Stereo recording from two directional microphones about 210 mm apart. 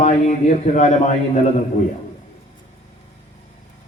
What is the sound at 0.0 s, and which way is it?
A man's voice, 30° left (ahead or behind).